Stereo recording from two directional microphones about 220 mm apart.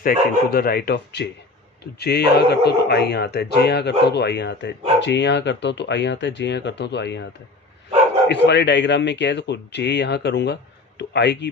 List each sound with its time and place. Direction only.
0.0 s speech: 40° left (ahead or behind)
8.3 s speech: 50° left (ahead or behind)